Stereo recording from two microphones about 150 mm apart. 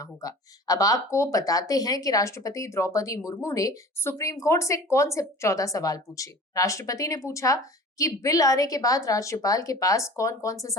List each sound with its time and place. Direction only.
0.0 s speech: 25° left (ahead or behind)